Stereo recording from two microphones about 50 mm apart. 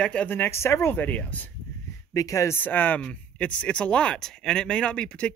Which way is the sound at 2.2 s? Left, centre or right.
Left.